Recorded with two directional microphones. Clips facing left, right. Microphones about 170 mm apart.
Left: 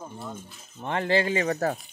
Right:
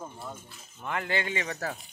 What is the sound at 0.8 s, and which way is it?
Speech, 30° left (ahead or behind).